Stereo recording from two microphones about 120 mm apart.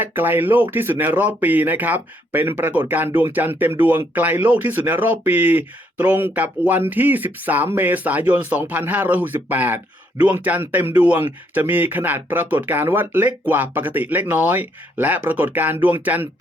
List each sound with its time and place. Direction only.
0.0 s speech: 15° right (ahead or behind)